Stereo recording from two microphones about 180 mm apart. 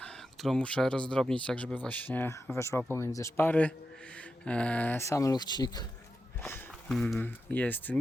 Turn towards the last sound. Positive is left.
turn(degrees=10)  # may be behind; listen again after turning